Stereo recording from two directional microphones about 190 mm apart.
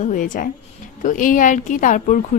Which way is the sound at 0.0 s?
45° left (ahead or behind).